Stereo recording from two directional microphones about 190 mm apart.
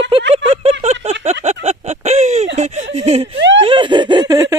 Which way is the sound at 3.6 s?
25° right (ahead or behind).